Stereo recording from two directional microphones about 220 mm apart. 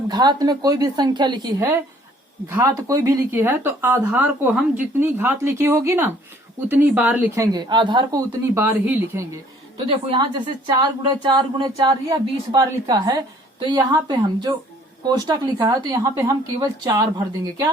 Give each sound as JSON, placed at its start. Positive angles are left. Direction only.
{"t": 0.1, "sound": "a woman's voice", "side_deg": -20}
{"t": 8.5, "sound": "speech", "side_deg": -10}
{"t": 9.7, "sound": "a woman's voice", "side_deg": -20}